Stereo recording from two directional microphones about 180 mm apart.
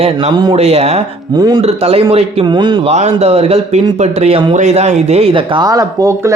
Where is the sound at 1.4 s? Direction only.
20° right (ahead or behind).